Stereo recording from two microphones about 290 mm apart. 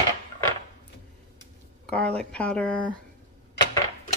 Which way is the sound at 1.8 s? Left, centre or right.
Centre.